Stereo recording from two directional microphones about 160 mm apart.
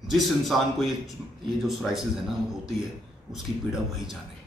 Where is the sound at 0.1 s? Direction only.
Centre (ahead or behind).